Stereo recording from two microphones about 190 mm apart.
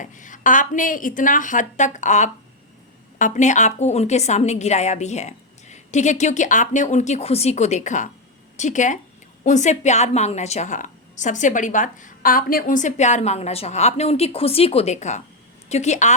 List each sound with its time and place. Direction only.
0.0 s a woman's voice: 40° left (ahead or behind)